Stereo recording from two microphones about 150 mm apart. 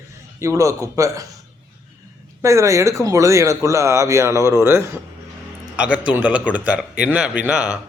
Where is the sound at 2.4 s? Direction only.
20° right (ahead or behind).